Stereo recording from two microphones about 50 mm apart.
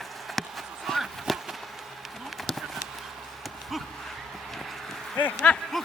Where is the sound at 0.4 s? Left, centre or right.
Centre.